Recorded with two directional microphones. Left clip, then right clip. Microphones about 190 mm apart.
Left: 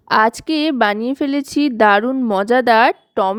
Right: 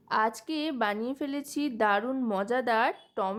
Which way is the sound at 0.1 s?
45° left (ahead or behind).